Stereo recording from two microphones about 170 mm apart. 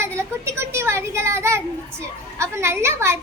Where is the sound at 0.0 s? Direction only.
15° right (ahead or behind).